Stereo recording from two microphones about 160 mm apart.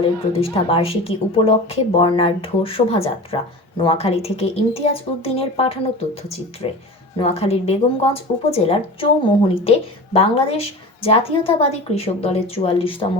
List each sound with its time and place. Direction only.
0.3 s a woman's voice: 35° left (ahead or behind)